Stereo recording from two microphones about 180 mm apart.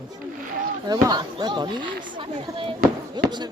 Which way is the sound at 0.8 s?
20° right (ahead or behind).